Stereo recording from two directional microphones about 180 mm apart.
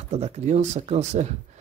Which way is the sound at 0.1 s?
40° right (ahead or behind).